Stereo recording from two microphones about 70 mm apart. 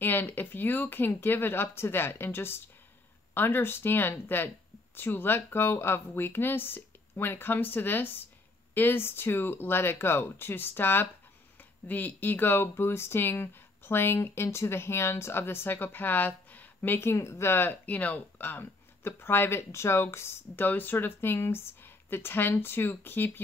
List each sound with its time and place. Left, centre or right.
0.0 s speech: left